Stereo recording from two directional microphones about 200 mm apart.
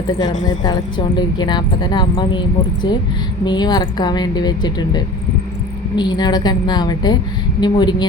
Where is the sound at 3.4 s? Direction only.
20° left (ahead or behind).